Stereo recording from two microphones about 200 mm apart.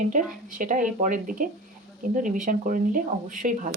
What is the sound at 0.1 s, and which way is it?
Speech, 40° right (ahead or behind).